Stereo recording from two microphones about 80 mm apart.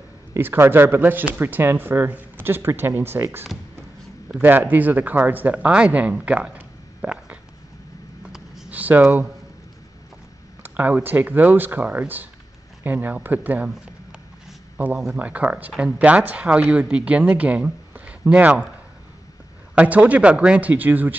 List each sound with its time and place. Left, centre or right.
0.3 s speech: right
4.3 s speech: right
8.2 s a sound: centre
8.6 s a sound: centre
10.6 s speech: right
15.1 s speech: centre
19.7 s speech: centre